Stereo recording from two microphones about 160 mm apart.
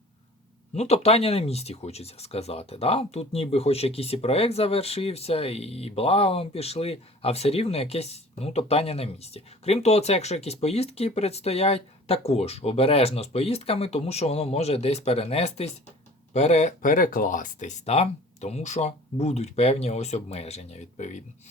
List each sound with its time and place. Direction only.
0.7 s speech: 40° left (ahead or behind)